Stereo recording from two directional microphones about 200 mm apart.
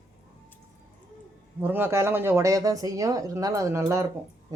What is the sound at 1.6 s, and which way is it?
Speech, 10° right (ahead or behind).